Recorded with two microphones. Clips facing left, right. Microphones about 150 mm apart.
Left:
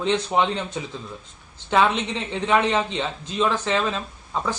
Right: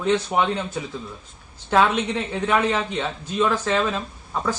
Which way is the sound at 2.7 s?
15° left (ahead or behind).